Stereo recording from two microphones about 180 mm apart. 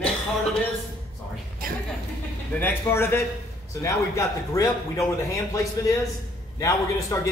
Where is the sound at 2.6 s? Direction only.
10° left (ahead or behind).